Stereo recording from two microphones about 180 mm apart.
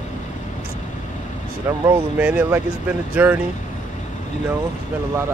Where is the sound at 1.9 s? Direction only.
10° right (ahead or behind).